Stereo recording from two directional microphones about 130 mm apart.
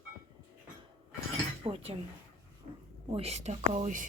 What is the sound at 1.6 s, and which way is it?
Cutlery, 45° right (ahead or behind).